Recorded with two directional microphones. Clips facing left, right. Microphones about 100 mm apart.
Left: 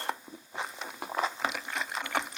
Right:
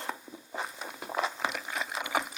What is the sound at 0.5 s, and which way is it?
Walk, centre (ahead or behind).